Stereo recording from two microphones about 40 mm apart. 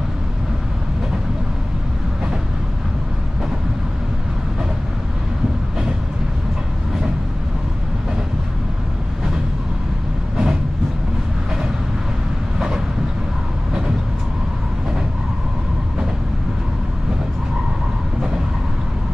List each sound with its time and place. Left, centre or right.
10.3 s vehicle: centre
12.5 s train: centre